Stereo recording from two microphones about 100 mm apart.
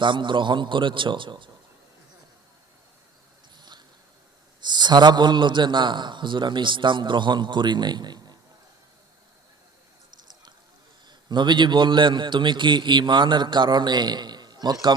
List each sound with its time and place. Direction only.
0.0 s a man's voice: 55° right (ahead or behind)
3.6 s mouse: 50° right (ahead or behind)
4.6 s a man's voice: 45° right (ahead or behind)
10.2 s a sound: 45° right (ahead or behind)
11.1 s a man's voice: 50° right (ahead or behind)